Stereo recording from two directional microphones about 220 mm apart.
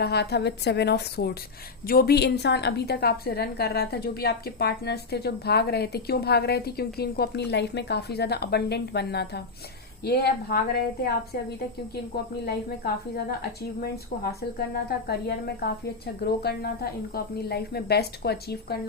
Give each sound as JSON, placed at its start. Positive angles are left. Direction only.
{"t": 0.0, "sound": "a woman's voice", "side_deg": 45}
{"t": 12.1, "sound": "a woman's voice", "side_deg": 45}